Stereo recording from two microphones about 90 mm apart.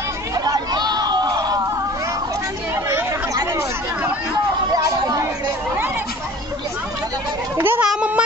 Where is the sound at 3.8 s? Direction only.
15° right (ahead or behind).